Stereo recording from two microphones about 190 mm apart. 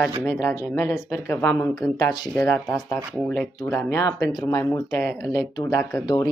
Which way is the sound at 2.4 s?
10° left (ahead or behind).